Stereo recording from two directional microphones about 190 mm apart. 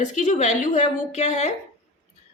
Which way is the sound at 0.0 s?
40° left (ahead or behind).